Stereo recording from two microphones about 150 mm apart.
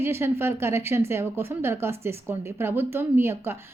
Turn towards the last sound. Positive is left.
turn(degrees=-15)  # may be behind; listen again after turning